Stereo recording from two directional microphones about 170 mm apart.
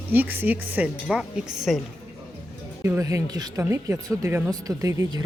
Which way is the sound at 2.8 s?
15° right (ahead or behind).